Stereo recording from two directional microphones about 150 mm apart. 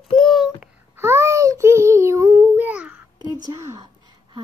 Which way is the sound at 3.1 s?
25° right (ahead or behind).